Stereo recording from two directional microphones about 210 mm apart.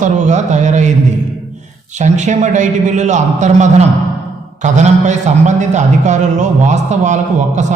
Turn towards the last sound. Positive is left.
turn(degrees=-35)  # may be behind; listen again after turning